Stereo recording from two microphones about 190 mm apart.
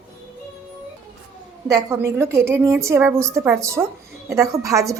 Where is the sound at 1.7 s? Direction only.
15° right (ahead or behind).